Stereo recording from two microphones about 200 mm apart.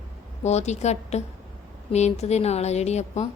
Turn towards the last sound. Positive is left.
turn(degrees=35)  # may be behind; listen again after turning